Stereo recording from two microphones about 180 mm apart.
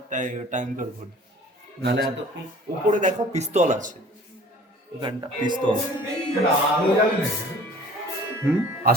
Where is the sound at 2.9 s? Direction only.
45° right (ahead or behind).